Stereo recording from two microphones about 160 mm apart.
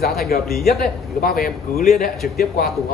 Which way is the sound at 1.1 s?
70° left (ahead or behind).